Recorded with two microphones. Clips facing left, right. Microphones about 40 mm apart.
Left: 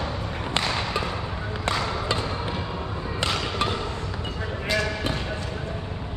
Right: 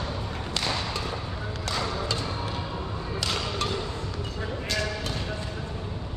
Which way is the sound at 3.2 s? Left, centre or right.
Left.